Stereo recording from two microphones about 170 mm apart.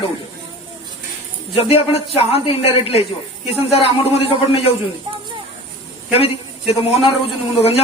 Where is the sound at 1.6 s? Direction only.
35° left (ahead or behind).